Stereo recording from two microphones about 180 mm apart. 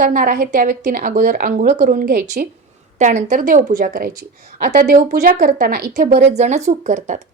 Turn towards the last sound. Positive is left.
turn(degrees=-40)  # may be behind; listen again after turning